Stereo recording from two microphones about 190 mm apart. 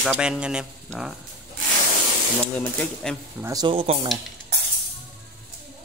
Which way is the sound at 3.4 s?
20° right (ahead or behind).